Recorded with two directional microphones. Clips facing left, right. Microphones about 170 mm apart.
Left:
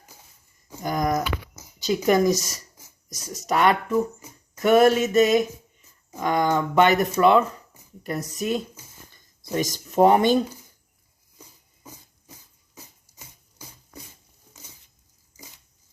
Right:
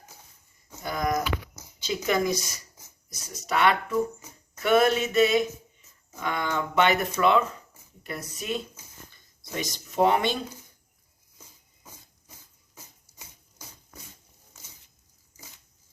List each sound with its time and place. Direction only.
0.8 s a sound: 40° left (ahead or behind)
1.8 s male singing: 40° left (ahead or behind)
6.1 s speech: 40° left (ahead or behind)
8.0 s male singing: 40° left (ahead or behind)